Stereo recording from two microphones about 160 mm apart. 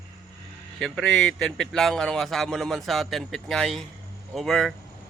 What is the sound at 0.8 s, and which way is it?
Speech, 5° left (ahead or behind).